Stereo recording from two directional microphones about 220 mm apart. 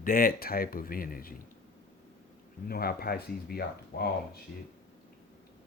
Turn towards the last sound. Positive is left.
turn(degrees=45)  # may be behind; listen again after turning